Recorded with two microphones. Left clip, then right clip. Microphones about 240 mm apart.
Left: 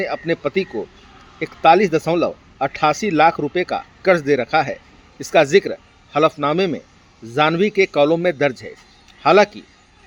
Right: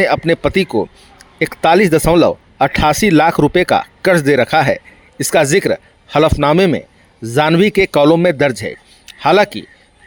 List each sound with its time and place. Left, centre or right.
0.0 s a man's voice: right